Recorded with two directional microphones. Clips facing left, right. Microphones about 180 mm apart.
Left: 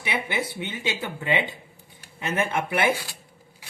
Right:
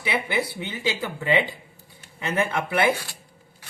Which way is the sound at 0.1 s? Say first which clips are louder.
Right 2 dB; 20° left (ahead or behind).